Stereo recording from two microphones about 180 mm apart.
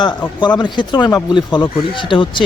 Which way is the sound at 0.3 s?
25° left (ahead or behind).